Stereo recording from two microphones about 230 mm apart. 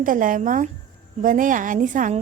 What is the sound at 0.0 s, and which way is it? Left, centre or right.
A woman's voice, right.